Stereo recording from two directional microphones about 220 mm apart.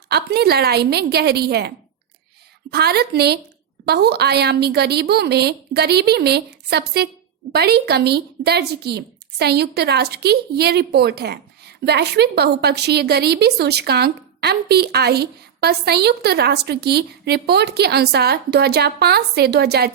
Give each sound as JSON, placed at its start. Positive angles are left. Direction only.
{"t": 0.1, "sound": "speech", "side_deg": -45}